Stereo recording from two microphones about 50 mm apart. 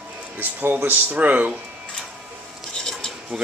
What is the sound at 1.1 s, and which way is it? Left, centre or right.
Speech, right.